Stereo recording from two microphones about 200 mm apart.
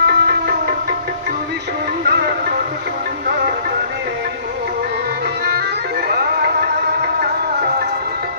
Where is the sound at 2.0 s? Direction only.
55° right (ahead or behind).